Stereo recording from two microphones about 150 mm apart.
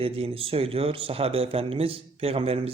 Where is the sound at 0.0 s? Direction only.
40° right (ahead or behind).